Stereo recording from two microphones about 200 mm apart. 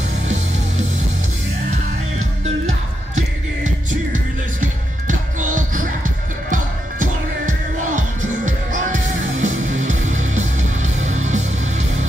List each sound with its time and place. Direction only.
4.1 s music: 40° right (ahead or behind)